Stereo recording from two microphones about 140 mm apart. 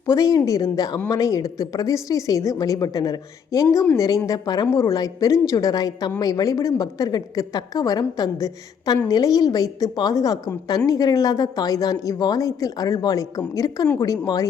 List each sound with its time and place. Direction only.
0.1 s speech: 25° left (ahead or behind)